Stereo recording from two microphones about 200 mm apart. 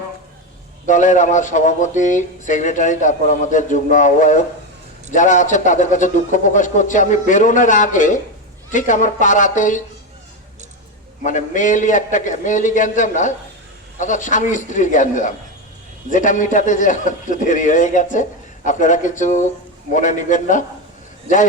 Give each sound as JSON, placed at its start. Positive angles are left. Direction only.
{"t": 0.9, "sound": "speech", "side_deg": 40}
{"t": 11.2, "sound": "speech", "side_deg": 40}